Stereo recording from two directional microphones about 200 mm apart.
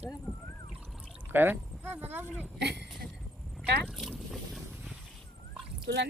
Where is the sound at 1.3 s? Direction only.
10° right (ahead or behind).